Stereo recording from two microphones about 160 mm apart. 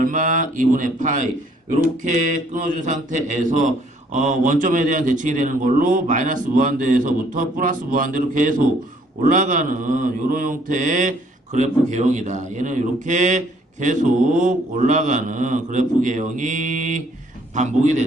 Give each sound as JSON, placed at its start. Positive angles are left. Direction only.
{"t": 0.0, "sound": "a man's voice", "side_deg": -55}